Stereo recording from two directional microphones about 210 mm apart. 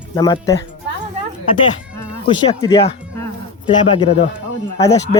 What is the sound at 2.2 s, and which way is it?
Speech, 20° left (ahead or behind).